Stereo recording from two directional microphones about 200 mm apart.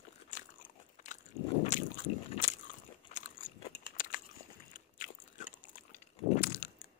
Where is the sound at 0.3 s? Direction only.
40° left (ahead or behind).